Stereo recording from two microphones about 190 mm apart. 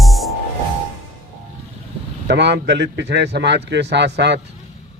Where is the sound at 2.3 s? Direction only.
65° right (ahead or behind).